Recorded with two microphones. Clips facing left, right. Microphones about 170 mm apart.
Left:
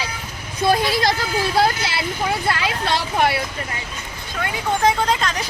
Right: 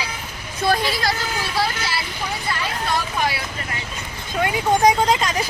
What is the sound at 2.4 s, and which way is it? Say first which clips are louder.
Speech: left 3 dB; 80° left.